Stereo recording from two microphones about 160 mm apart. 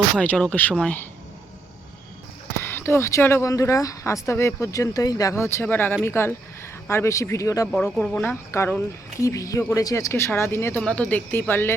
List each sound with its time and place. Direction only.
0.2 s speech: 5° left (ahead or behind)
2.6 s speech: 15° left (ahead or behind)
7.7 s speech: 5° left (ahead or behind)